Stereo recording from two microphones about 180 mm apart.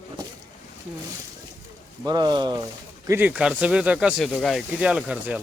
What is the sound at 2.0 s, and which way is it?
Speech, 25° right (ahead or behind).